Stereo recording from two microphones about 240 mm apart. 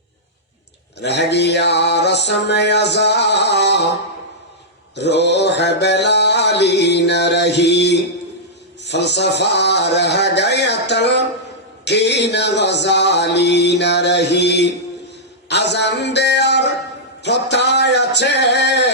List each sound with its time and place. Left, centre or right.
0.9 s mantra: left
4.9 s mantra: left
15.4 s a man's voice: left
17.2 s mantra: left